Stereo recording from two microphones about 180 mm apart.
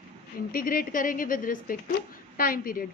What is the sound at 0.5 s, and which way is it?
A woman's voice, 50° left (ahead or behind).